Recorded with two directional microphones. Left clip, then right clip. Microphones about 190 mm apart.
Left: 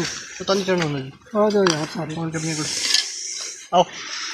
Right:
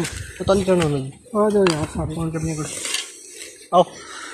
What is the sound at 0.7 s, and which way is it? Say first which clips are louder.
Speech: right 3 dB; 60° right (ahead or behind).